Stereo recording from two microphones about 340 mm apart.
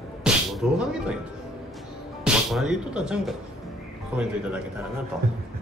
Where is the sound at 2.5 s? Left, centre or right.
Centre.